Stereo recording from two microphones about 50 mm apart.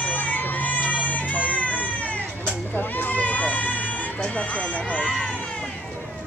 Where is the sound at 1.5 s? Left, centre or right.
Left.